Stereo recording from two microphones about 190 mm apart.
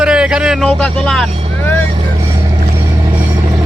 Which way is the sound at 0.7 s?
5° left (ahead or behind).